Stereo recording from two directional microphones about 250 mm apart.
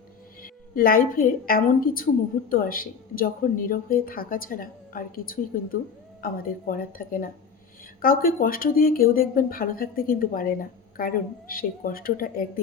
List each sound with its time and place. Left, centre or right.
0.4 s a woman's voice: left